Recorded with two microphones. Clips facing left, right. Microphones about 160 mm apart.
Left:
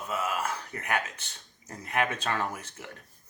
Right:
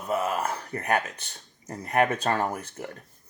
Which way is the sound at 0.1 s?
35° right (ahead or behind).